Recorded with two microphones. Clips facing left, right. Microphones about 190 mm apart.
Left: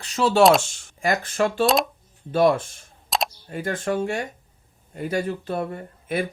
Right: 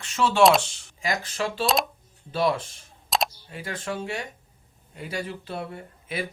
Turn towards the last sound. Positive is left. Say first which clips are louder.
# left 6 dB
turn(degrees=50)  # may be behind; listen again after turning